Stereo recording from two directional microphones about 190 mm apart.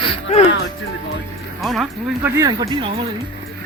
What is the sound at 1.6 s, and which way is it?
Speech, centre (ahead or behind).